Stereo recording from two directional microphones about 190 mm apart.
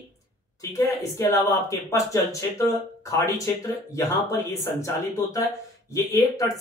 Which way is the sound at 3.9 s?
15° left (ahead or behind).